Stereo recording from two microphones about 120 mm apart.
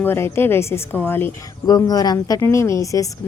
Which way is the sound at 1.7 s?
30° left (ahead or behind).